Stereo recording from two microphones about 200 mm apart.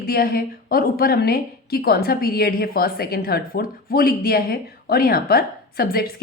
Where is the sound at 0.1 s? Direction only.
50° left (ahead or behind).